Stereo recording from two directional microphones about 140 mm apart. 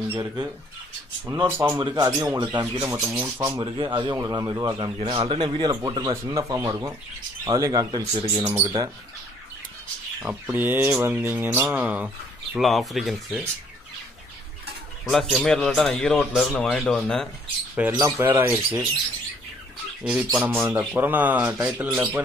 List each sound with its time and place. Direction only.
0.1 s speech: 20° right (ahead or behind)
3.6 s speech: 35° right (ahead or behind)
10.2 s speech: 10° right (ahead or behind)
12.5 s speech: centre (ahead or behind)
15.0 s speech: centre (ahead or behind)
17.9 s speech: 15° right (ahead or behind)
20.0 s speech: 5° right (ahead or behind)